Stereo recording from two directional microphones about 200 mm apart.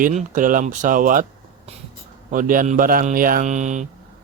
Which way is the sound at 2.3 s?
40° right (ahead or behind).